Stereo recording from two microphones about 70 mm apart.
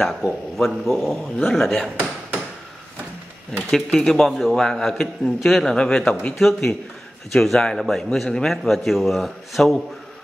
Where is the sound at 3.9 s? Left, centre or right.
Centre.